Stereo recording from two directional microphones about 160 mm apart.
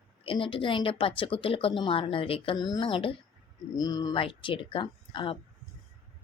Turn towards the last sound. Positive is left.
turn(degrees=30)  # may be behind; listen again after turning